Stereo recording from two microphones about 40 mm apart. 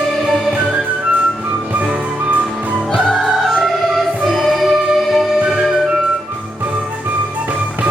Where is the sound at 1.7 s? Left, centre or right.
Right.